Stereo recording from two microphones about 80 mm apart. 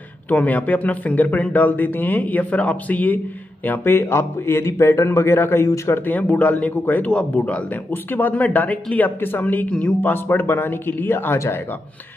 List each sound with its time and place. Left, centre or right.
0.3 s speech: left
6.2 s a man's voice: centre